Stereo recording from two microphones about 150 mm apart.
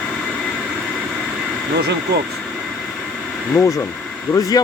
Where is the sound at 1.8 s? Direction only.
90° right.